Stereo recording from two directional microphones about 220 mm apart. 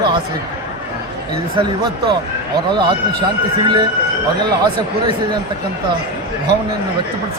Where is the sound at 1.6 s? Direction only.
20° right (ahead or behind).